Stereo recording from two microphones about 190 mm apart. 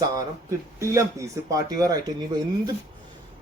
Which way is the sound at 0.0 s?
20° right (ahead or behind).